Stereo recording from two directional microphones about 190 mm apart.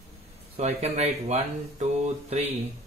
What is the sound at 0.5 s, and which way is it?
Speech, 35° right (ahead or behind).